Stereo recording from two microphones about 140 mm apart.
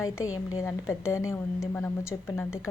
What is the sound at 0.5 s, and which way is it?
Speech, 20° left (ahead or behind).